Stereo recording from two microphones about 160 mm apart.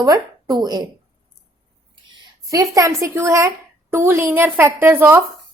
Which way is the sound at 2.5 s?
20° right (ahead or behind).